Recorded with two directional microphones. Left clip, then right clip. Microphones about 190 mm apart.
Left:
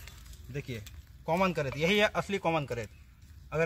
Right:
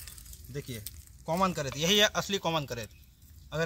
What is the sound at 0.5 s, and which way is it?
Speech, 20° left (ahead or behind).